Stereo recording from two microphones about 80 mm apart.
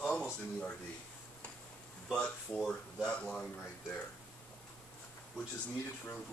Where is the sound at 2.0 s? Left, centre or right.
Centre.